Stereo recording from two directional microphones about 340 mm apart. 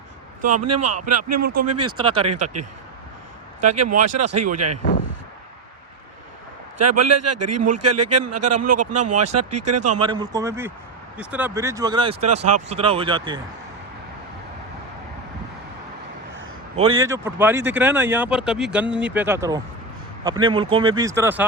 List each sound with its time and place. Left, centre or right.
0.5 s a man's voice: right
3.6 s a man's voice: right
6.7 s a man's voice: right
10.0 s speech: centre
16.7 s speech: centre